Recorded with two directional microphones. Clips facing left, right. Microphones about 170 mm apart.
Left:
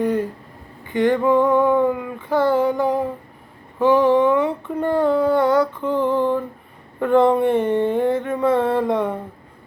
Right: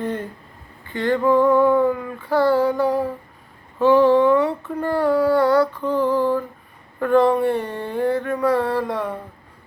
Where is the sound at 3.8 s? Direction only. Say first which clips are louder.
Right 1 dB; 15° left (ahead or behind).